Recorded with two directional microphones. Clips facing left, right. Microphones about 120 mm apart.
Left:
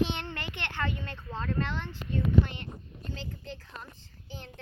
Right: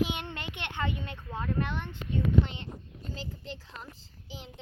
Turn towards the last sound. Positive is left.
turn(degrees=-90)